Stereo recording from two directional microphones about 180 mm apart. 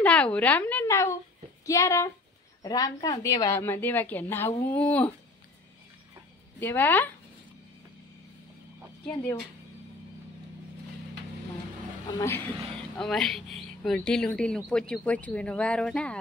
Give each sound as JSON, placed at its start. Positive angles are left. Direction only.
{"t": 0.0, "sound": "a woman's voice", "side_deg": 10}
{"t": 6.6, "sound": "a woman's voice", "side_deg": 10}
{"t": 9.1, "sound": "speech", "side_deg": 20}
{"t": 12.2, "sound": "speech", "side_deg": 10}